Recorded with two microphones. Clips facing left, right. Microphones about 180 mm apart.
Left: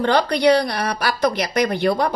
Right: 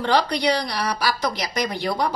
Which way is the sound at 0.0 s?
55° left (ahead or behind).